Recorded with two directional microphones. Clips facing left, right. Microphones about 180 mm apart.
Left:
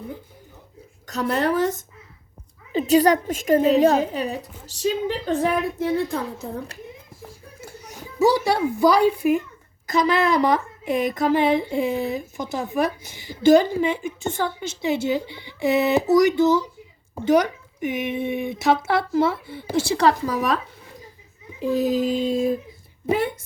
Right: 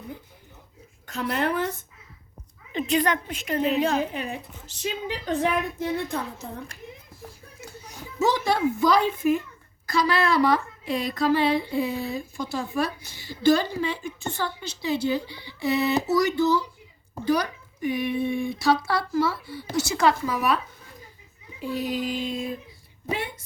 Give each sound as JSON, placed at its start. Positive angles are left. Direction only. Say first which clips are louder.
{"t": 1.0, "sound": "a woman's voice", "louder": "left 4 dB", "side_deg": 40}
{"t": 2.7, "sound": "a woman's voice", "louder": "left 7 dB", "side_deg": 40}
{"t": 8.2, "sound": "a woman's voice", "louder": "left 4 dB", "side_deg": 10}
{"t": 21.7, "sound": "a sound", "louder": "left 7 dB", "side_deg": 45}